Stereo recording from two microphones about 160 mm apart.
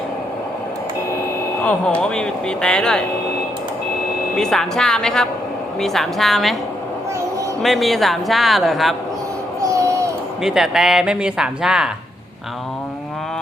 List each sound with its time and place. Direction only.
1.6 s speech: 5° left (ahead or behind)
4.4 s speech: 5° left (ahead or behind)
7.6 s speech: centre (ahead or behind)
9.6 s a sound: 20° right (ahead or behind)
10.4 s speech: 5° right (ahead or behind)